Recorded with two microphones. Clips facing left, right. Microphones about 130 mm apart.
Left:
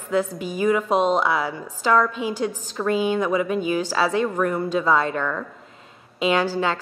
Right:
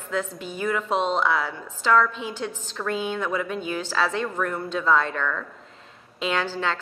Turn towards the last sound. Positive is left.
turn(degrees=10)  # may be behind; listen again after turning